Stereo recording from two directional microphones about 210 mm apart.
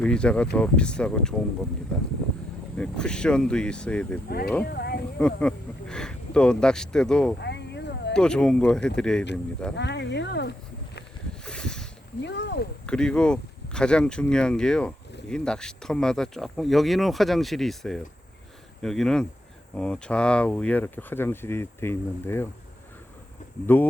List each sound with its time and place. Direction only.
0.0 s speech: 5° left (ahead or behind)
2.7 s speech: 5° left (ahead or behind)
4.3 s speech: 45° left (ahead or behind)
5.2 s speech: 5° left (ahead or behind)
7.4 s a sound: 55° left (ahead or behind)
8.1 s speech: 5° left (ahead or behind)
9.7 s speech: 55° left (ahead or behind)
11.4 s a sound: 5° left (ahead or behind)
12.2 s speech: 55° left (ahead or behind)
12.8 s speech: 5° left (ahead or behind)
23.6 s speech: 10° left (ahead or behind)